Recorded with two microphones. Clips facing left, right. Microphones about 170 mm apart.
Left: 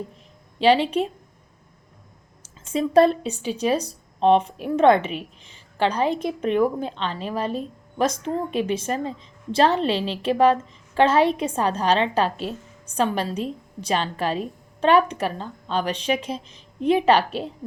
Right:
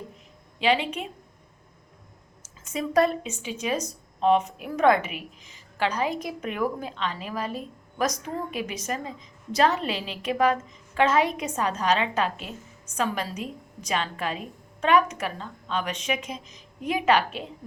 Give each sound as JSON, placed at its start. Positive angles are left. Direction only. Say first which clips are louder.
{"t": 0.6, "sound": "speech", "louder": "left 6 dB", "side_deg": 35}
{"t": 2.4, "sound": "speech", "louder": "left 6 dB", "side_deg": 30}